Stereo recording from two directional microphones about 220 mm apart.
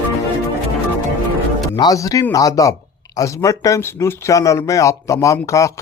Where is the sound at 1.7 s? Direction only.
15° left (ahead or behind).